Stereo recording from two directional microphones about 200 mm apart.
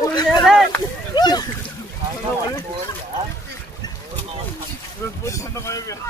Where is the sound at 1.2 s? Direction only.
20° left (ahead or behind).